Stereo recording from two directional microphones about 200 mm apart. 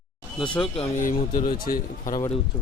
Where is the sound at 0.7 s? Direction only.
35° left (ahead or behind).